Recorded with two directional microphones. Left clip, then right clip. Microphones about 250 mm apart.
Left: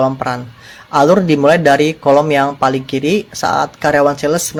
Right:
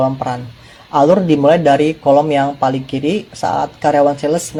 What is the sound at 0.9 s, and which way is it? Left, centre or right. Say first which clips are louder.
Speech: left 1 dB; left.